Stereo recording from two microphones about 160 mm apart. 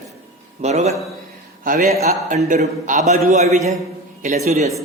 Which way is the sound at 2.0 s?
45° right (ahead or behind).